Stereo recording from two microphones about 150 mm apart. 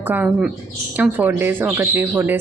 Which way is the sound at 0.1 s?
10° right (ahead or behind).